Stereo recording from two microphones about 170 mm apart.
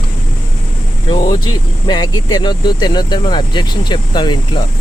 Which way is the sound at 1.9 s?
25° left (ahead or behind).